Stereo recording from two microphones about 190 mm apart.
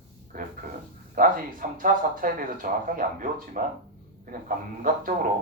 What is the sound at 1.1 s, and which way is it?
Speech, 45° right (ahead or behind).